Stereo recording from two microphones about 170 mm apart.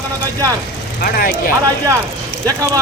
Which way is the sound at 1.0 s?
55° left (ahead or behind).